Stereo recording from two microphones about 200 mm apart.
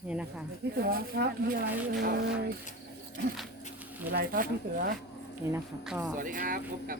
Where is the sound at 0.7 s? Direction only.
50° right (ahead or behind).